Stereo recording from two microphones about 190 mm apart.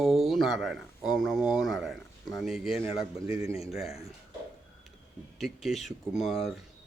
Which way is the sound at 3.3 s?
30° left (ahead or behind).